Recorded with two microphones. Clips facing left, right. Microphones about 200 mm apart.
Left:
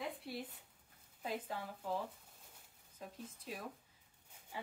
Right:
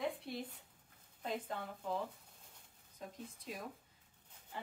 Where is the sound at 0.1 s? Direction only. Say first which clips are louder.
Right 1 dB; 5° left (ahead or behind).